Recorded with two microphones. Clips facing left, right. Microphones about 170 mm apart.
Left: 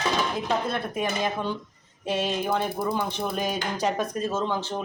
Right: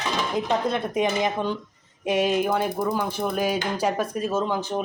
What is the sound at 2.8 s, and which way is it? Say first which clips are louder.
Speech: right 2 dB; 5° left (ahead or behind).